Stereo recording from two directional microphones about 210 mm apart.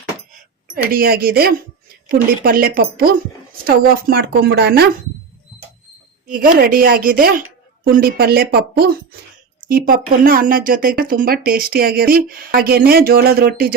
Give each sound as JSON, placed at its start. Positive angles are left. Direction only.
{"t": 0.7, "sound": "speech", "side_deg": -45}
{"t": 6.2, "sound": "speech", "side_deg": -45}